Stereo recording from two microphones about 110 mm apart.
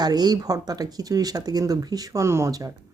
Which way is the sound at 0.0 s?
40° right (ahead or behind).